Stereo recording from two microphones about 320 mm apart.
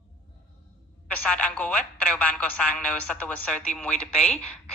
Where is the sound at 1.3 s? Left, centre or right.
Centre.